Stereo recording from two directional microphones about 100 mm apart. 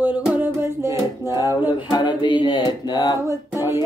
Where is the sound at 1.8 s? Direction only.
45° left (ahead or behind).